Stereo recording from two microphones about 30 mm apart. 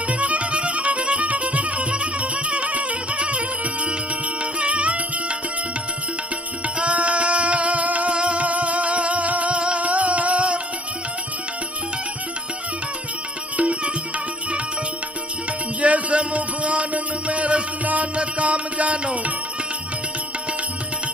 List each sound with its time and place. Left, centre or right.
0.1 s music: right
6.7 s music: right
8.1 s music: right
13.6 s music: right
15.8 s music: right
18.1 s music: right